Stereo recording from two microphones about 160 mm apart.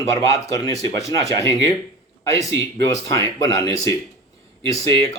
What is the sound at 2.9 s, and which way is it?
Speech, 20° left (ahead or behind).